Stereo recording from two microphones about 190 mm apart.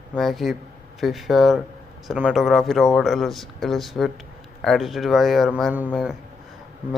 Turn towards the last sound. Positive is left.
turn(degrees=0)  # may be behind; listen again after turning